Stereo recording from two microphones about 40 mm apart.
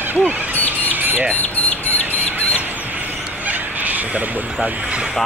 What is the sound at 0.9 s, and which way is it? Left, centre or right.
Squawk, right.